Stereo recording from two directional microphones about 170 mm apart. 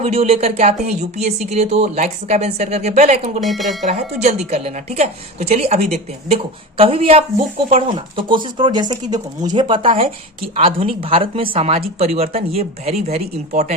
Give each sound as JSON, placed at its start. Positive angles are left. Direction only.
{"t": 0.0, "sound": "speech", "side_deg": -40}
{"t": 3.4, "sound": "speech", "side_deg": 0}
{"t": 3.8, "sound": "speech", "side_deg": -40}